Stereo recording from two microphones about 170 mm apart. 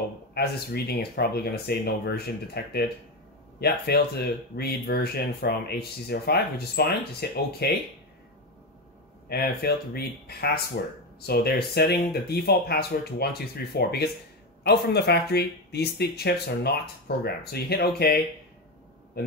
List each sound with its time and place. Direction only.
0.3 s speech: 70° left (ahead or behind)
9.3 s speech: 65° left (ahead or behind)